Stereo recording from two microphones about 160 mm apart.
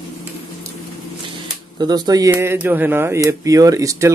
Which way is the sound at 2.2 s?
15° right (ahead or behind).